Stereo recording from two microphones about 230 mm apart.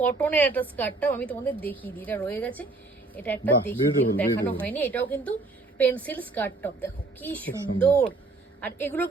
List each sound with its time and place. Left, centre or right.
0.0 s a woman's voice: centre